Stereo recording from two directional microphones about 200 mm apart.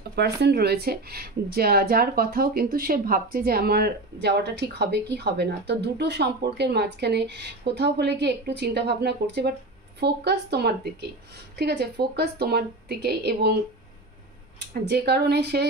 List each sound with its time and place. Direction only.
0.1 s speech: 55° right (ahead or behind)
14.7 s speech: 55° right (ahead or behind)